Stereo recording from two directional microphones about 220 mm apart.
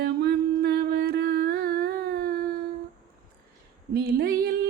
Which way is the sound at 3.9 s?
45° right (ahead or behind).